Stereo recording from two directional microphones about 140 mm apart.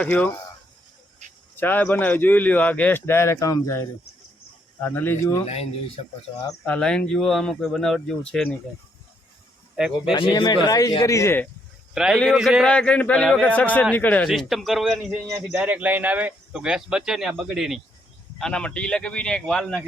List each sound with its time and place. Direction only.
0.0 s a man's voice: 10° left (ahead or behind)
1.5 s a man's voice: 15° left (ahead or behind)
4.8 s a man's voice: 10° left (ahead or behind)
6.7 s speech: 5° left (ahead or behind)
10.1 s speech: 35° left (ahead or behind); by 11.4 s 20° left (ahead or behind)
11.9 s speech: 5° right (ahead or behind)
12.7 s a man's voice: 10° left (ahead or behind)
14.3 s a man's voice: centre (ahead or behind)